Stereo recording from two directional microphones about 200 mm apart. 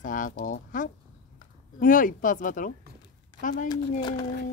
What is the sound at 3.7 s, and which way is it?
Speech, 20° left (ahead or behind).